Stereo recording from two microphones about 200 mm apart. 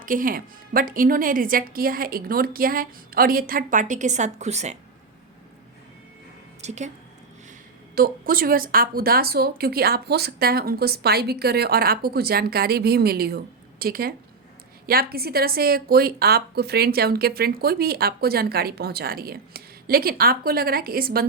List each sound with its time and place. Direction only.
0.0 s a woman's voice: 45° right (ahead or behind)
6.6 s speech: 35° right (ahead or behind)
7.9 s a woman's voice: 45° right (ahead or behind)